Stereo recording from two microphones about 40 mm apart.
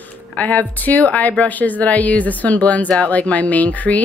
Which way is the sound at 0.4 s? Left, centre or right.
Left.